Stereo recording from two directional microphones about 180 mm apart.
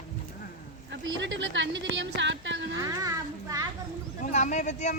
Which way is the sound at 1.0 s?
90° right.